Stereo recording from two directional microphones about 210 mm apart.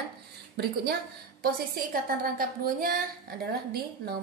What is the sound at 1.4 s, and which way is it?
A woman's voice, 45° right (ahead or behind).